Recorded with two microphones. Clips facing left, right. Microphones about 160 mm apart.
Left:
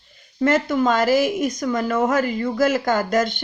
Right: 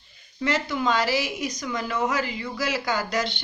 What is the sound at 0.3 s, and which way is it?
A woman's voice, 50° left (ahead or behind).